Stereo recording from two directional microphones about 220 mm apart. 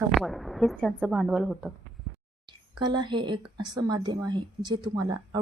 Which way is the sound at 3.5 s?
20° right (ahead or behind).